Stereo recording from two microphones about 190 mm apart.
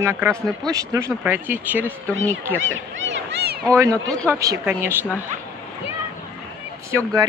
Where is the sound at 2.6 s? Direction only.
85° right; by 3.5 s 65° right (ahead or behind).